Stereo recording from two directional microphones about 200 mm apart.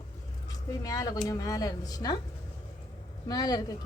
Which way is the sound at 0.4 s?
20° left (ahead or behind).